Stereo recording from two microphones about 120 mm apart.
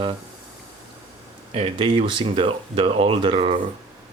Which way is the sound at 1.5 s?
50° right (ahead or behind).